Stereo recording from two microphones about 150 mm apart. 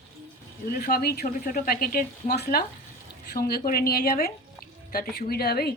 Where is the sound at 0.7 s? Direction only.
85° left.